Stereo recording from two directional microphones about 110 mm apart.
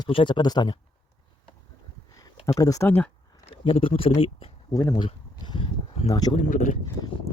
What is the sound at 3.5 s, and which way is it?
Speech, 55° left (ahead or behind).